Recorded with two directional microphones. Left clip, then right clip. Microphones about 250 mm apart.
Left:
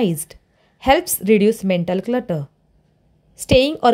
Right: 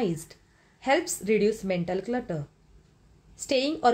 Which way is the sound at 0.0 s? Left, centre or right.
Left.